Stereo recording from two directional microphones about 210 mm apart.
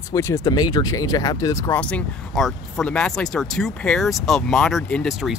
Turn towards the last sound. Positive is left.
turn(degrees=0)  # may be behind; listen again after turning